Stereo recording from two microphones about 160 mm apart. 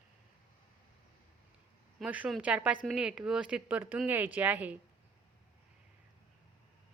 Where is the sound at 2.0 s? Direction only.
5° right (ahead or behind).